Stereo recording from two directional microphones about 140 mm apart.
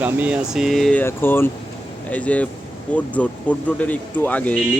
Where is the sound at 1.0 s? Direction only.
15° left (ahead or behind).